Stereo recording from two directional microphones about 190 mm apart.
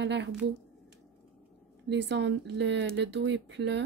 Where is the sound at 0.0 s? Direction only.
70° right (ahead or behind).